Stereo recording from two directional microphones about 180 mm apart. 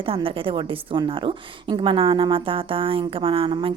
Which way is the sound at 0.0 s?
30° right (ahead or behind).